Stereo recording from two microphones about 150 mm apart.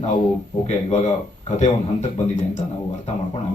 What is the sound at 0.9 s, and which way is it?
A man's voice, 50° left (ahead or behind).